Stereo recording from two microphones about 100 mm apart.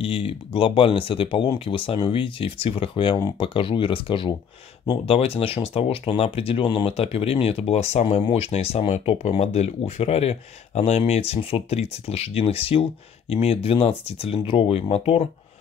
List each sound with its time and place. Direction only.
0.0 s speech: 65° left (ahead or behind)
5.0 s speech: 75° left (ahead or behind)